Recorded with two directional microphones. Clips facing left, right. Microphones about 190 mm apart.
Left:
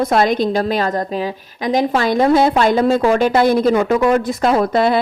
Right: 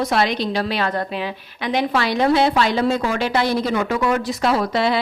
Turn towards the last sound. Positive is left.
turn(degrees=50)  # may be behind; listen again after turning